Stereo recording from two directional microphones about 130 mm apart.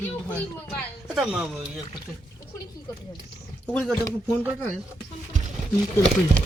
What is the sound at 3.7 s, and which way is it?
Speech, 5° left (ahead or behind).